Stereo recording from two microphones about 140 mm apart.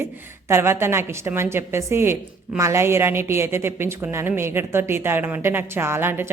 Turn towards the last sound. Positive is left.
turn(degrees=-15)  # may be behind; listen again after turning